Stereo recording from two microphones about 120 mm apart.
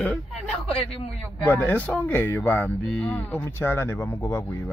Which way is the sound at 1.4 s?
15° left (ahead or behind).